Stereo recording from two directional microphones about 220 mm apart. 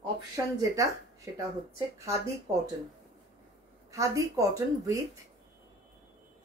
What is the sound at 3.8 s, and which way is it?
Speech, 15° right (ahead or behind).